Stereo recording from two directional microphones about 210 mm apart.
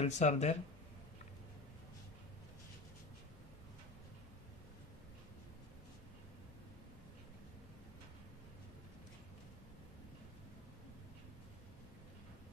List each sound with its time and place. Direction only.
0.0 s speech: 35° left (ahead or behind)